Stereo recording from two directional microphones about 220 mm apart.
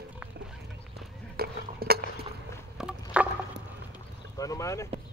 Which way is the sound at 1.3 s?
45° right (ahead or behind).